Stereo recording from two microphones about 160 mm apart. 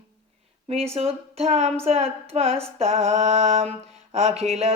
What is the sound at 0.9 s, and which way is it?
Music, 40° right (ahead or behind).